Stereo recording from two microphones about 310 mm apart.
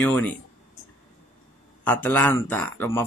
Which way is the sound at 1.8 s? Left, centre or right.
Centre.